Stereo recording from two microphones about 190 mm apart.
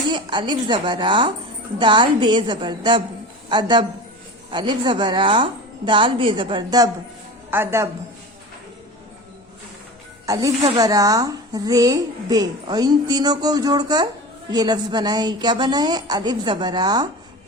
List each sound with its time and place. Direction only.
0.1 s a woman's voice: 25° right (ahead or behind)
10.2 s a woman's voice: 20° right (ahead or behind)